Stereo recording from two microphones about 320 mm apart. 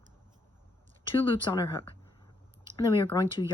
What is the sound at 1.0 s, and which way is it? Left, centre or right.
Speech, centre.